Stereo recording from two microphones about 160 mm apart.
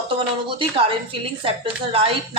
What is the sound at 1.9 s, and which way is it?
Speech, 35° right (ahead or behind).